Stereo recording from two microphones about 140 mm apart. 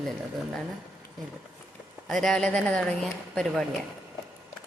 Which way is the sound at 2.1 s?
Centre (ahead or behind).